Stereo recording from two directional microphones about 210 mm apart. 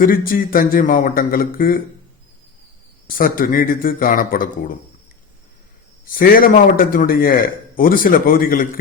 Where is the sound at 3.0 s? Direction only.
40° left (ahead or behind).